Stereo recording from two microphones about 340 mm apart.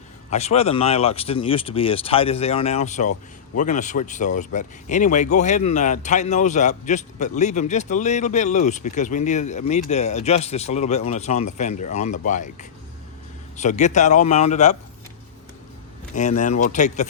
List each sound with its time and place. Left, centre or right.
0.3 s speech: centre
16.1 s speech: left